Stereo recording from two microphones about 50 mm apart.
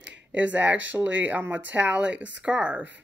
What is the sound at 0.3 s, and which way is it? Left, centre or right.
Speech, right.